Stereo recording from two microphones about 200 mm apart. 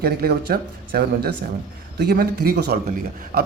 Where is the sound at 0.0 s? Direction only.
50° right (ahead or behind).